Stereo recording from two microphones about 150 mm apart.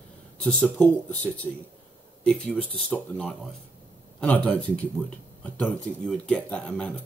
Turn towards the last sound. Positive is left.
turn(degrees=10)  # may be behind; listen again after turning